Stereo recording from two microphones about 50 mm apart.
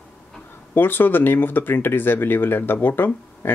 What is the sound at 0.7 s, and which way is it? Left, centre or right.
Speech, left.